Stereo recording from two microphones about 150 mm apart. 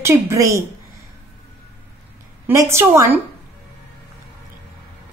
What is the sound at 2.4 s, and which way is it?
Speech, 20° right (ahead or behind).